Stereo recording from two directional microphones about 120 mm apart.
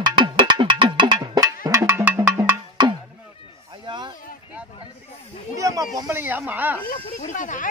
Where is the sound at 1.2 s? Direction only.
30° right (ahead or behind).